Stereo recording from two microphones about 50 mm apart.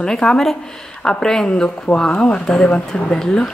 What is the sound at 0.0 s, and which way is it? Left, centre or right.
Speech, centre.